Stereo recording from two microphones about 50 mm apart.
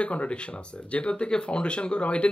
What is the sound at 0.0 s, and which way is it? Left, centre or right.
Speech, left.